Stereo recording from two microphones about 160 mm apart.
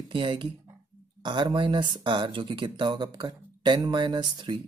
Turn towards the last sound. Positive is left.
turn(degrees=-30)  # may be behind; listen again after turning